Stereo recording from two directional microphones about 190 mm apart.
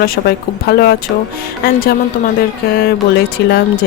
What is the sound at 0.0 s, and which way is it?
Speech, 55° left (ahead or behind).